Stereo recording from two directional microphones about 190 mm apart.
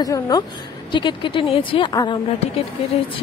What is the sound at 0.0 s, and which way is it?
Speech, 20° left (ahead or behind).